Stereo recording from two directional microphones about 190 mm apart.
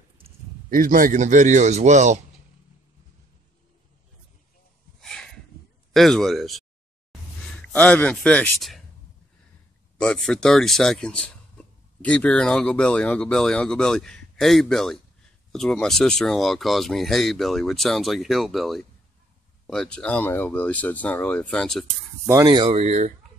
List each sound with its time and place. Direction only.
0.7 s a man's voice: 45° right (ahead or behind)
5.0 s a sound: 5° left (ahead or behind)
5.9 s speech: centre (ahead or behind)
9.9 s speech: 5° left (ahead or behind)
22.3 s speech: 20° right (ahead or behind)
22.8 s a man's voice: 40° right (ahead or behind)